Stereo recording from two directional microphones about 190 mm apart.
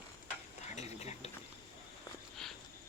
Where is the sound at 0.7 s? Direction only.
35° left (ahead or behind).